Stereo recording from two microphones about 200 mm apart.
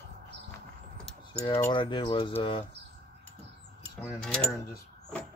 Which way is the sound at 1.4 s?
20° left (ahead or behind).